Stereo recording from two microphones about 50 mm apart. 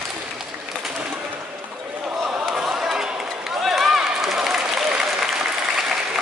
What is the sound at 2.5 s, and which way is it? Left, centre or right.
Run, centre.